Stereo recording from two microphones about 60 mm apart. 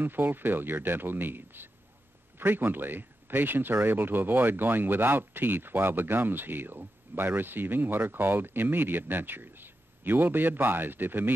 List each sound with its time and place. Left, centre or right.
0.0 s speech: right